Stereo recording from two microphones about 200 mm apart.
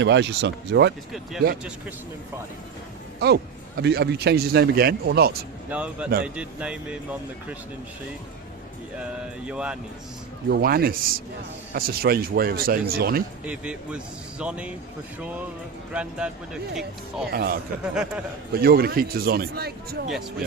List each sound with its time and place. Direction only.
0.0 s speech: 60° right (ahead or behind)
3.2 s a man's voice: 55° right (ahead or behind)
5.7 s speech: 5° right (ahead or behind)
9.5 s speech: 5° right (ahead or behind)
10.5 s a man's voice: 50° right (ahead or behind)
13.4 s speech: 5° right (ahead or behind)
15.9 s speech: 5° right (ahead or behind)
17.3 s a man's voice: 50° right (ahead or behind)
17.9 s speech: 5° right (ahead or behind)
18.5 s a man's voice: 50° right (ahead or behind)